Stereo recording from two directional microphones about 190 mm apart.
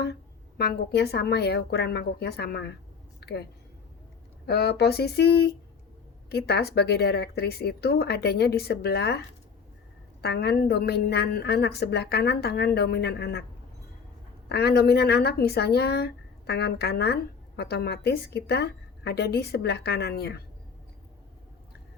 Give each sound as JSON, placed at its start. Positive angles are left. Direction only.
{"t": 0.0, "sound": "speech", "side_deg": 60}
{"t": 3.2, "sound": "a sound", "side_deg": 60}
{"t": 4.4, "sound": "speech", "side_deg": 60}
{"t": 14.5, "sound": "speech", "side_deg": 55}